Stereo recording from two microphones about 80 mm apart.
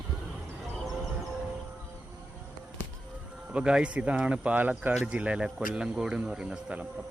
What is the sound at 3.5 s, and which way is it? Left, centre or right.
Speech, centre.